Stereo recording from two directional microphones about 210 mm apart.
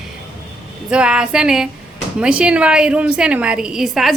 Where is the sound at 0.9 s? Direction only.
5° right (ahead or behind).